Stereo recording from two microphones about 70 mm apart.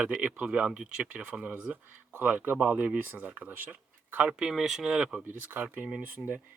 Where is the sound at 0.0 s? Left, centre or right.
Centre.